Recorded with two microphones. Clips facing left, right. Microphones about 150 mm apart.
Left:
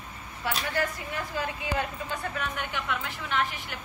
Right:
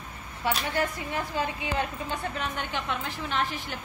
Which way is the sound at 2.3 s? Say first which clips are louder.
Right 1 dB; 30° right (ahead or behind).